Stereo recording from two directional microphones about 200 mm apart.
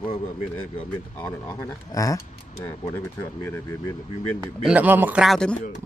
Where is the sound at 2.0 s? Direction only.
15° left (ahead or behind).